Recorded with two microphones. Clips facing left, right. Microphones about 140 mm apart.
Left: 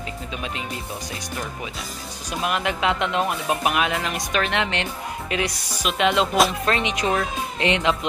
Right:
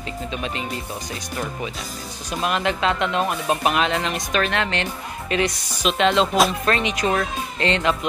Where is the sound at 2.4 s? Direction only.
10° left (ahead or behind).